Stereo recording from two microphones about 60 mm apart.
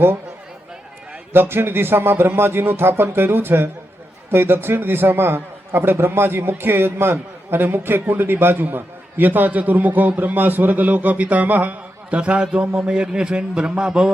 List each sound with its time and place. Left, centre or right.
1.3 s a man's voice: right; by 14.1 s centre